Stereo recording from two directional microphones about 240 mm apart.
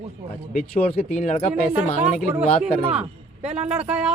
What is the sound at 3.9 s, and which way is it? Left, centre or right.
Speech, centre.